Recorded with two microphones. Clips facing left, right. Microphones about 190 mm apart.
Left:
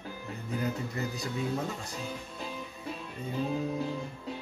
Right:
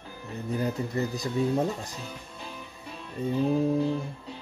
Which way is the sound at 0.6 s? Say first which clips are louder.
Right 4 dB; 35° right (ahead or behind).